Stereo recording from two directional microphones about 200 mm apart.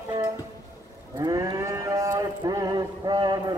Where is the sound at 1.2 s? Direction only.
20° right (ahead or behind).